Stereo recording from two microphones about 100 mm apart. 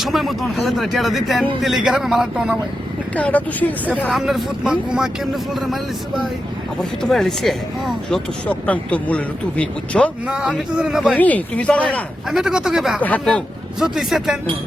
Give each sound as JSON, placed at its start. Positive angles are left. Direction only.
{"t": 0.0, "sound": "speech", "side_deg": 0}
{"t": 3.2, "sound": "speech", "side_deg": 15}
{"t": 4.1, "sound": "speech", "side_deg": -5}
{"t": 8.4, "sound": "speech", "side_deg": 15}
{"t": 10.2, "sound": "a man's voice", "side_deg": -5}
{"t": 11.1, "sound": "speech", "side_deg": 15}
{"t": 12.3, "sound": "speech", "side_deg": -5}
{"t": 13.0, "sound": "speech", "side_deg": 15}
{"t": 13.7, "sound": "speech", "side_deg": -5}